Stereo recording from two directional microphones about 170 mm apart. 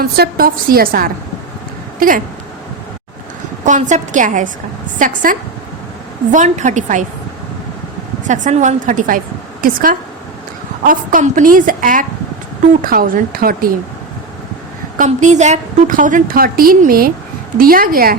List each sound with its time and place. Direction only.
0.0 s a woman's voice: 60° right (ahead or behind)
3.6 s a woman's voice: 45° right (ahead or behind)
8.3 s a woman's voice: 45° right (ahead or behind)
14.9 s a woman's voice: 45° right (ahead or behind)